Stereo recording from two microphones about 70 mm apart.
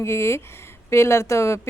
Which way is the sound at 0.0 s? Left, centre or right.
Left.